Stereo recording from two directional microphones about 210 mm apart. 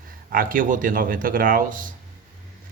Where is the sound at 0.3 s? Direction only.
40° right (ahead or behind).